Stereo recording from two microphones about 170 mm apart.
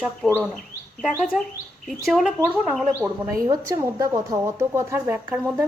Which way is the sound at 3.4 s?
15° right (ahead or behind).